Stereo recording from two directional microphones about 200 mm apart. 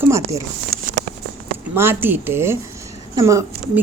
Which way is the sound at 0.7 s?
45° right (ahead or behind).